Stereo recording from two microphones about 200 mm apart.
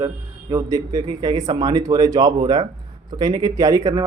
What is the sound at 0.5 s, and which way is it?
A man's voice, 15° right (ahead or behind).